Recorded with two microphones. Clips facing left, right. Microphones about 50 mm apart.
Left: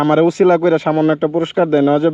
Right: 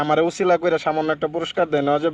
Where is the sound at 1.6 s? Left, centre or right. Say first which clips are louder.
Left 6 dB; left.